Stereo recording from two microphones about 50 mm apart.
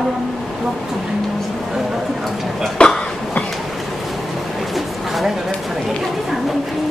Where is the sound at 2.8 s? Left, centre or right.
Left.